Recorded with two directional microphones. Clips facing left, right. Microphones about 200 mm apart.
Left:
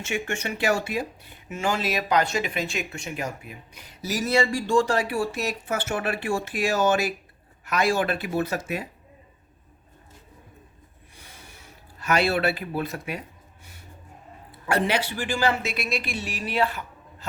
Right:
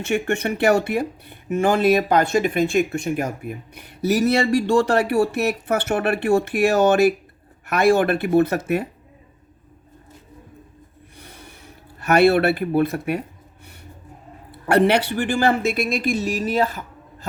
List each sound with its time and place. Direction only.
0.0 s speech: 60° right (ahead or behind)
11.2 s snort: 60° right (ahead or behind)
11.9 s speech: 60° right (ahead or behind)
14.7 s speech: 65° right (ahead or behind); by 16.8 s 45° right (ahead or behind)